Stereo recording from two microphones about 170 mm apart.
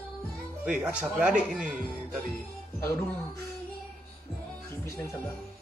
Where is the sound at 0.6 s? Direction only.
5° right (ahead or behind).